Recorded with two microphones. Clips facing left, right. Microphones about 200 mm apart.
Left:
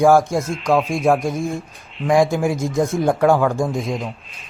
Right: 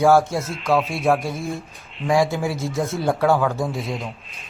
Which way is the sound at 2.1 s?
15° left (ahead or behind).